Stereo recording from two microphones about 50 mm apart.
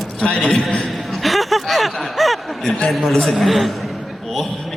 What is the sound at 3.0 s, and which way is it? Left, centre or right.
Speech, centre.